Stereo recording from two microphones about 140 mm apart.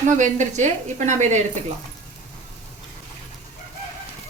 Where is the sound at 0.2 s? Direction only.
60° right (ahead or behind).